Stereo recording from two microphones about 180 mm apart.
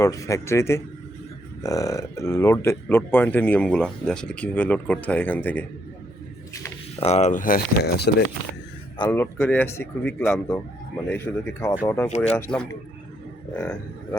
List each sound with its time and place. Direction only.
0.0 s speech: 15° left (ahead or behind)
7.0 s speech: 40° left (ahead or behind); by 8.1 s 65° left (ahead or behind)
9.0 s speech: 15° left (ahead or behind)
12.0 s speech: 40° left (ahead or behind)
12.3 s a man's voice: 5° left (ahead or behind)